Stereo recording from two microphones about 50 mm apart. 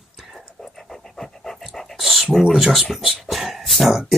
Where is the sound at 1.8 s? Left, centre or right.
Centre.